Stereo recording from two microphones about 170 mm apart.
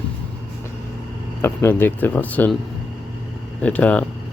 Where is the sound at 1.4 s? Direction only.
15° left (ahead or behind).